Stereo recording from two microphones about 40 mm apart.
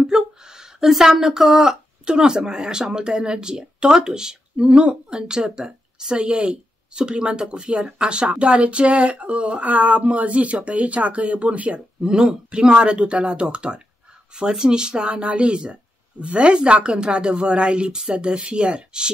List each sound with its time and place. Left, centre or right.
0.0 s a sound: centre
2.0 s a woman's voice: centre; by 11.8 s right
12.0 s a woman's voice: centre
14.3 s a woman's voice: centre